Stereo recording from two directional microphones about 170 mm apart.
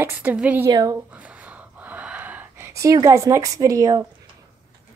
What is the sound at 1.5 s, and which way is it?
Gasp, 10° right (ahead or behind).